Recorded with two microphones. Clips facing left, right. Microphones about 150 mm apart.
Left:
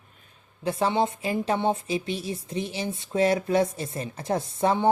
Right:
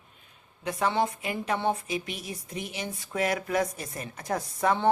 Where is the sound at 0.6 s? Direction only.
30° left (ahead or behind).